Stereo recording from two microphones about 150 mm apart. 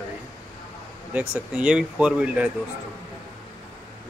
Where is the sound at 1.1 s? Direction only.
10° right (ahead or behind).